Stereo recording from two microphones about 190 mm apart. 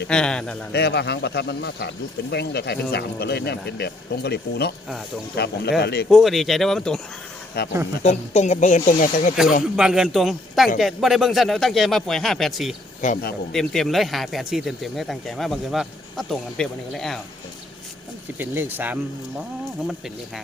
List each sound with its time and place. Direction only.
0.1 s speech: 5° left (ahead or behind)
0.7 s speech: 60° left (ahead or behind)
6.1 s speech: centre (ahead or behind)
7.6 s speech: 55° left (ahead or behind)
8.0 s speech: 35° left (ahead or behind)
9.7 s speech: 5° right (ahead or behind)
13.0 s a man's voice: 40° left (ahead or behind)
13.5 s speech: centre (ahead or behind)
18.3 s speech: 10° right (ahead or behind)